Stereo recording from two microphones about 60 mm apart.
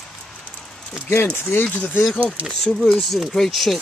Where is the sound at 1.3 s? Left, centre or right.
Left.